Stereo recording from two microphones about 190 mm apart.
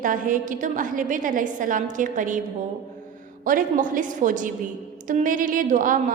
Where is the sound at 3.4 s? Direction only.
45° right (ahead or behind).